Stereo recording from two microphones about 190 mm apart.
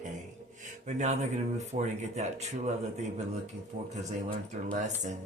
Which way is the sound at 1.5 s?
35° right (ahead or behind).